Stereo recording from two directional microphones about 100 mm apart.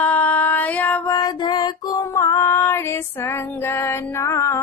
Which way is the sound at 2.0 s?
30° left (ahead or behind).